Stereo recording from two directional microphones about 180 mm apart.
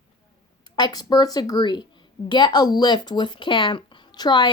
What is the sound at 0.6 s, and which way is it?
A woman's voice, 25° left (ahead or behind).